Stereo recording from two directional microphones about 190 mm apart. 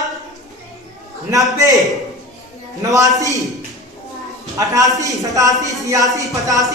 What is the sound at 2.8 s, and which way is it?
Speech, 15° right (ahead or behind).